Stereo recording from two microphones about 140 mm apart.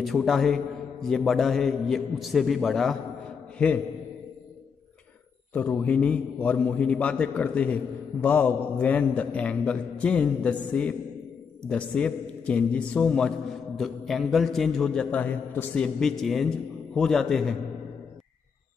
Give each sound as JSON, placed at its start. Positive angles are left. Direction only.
{"t": 0.0, "sound": "a man's voice", "side_deg": 0}
{"t": 5.8, "sound": "a man's voice", "side_deg": 10}